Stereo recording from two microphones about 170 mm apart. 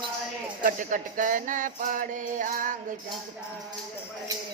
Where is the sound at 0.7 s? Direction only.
50° right (ahead or behind).